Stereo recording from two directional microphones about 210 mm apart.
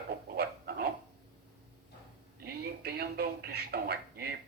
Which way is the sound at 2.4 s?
50° right (ahead or behind).